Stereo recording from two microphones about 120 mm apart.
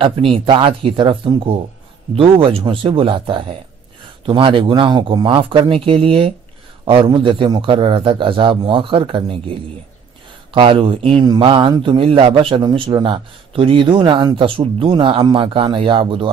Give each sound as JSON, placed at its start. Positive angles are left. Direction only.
{"t": 0.0, "sound": "a man's voice", "side_deg": -50}